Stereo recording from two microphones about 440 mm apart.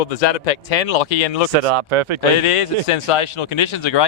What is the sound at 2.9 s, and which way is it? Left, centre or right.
Speech, left.